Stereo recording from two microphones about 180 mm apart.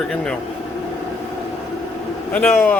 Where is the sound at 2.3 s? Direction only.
10° left (ahead or behind).